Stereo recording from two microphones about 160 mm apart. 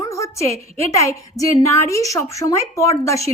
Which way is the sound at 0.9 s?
20° left (ahead or behind).